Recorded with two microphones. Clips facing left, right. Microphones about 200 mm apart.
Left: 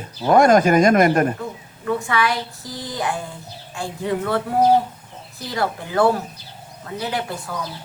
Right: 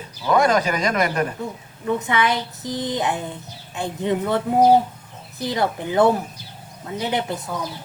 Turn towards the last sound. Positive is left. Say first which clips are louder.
# right 2 dB
turn(degrees=-20)  # may be behind; listen again after turning